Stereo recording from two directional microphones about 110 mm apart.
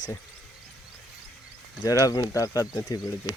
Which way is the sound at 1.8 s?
35° left (ahead or behind).